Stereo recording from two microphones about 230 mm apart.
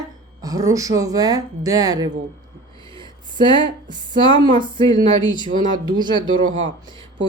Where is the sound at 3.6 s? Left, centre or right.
Centre.